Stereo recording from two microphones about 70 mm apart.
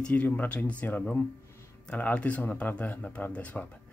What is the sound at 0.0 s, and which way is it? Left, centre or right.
Speech, left.